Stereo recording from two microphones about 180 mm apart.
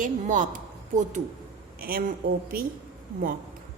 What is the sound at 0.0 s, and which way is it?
Speech, 45° right (ahead or behind).